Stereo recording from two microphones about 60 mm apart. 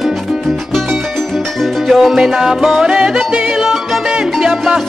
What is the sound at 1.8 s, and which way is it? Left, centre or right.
Music, centre.